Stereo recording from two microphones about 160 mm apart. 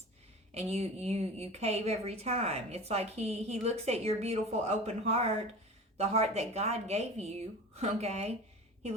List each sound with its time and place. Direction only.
0.5 s a woman's voice: 40° right (ahead or behind)